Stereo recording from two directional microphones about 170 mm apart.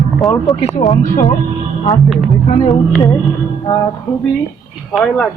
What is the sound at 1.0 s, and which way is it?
Speech, 50° left (ahead or behind).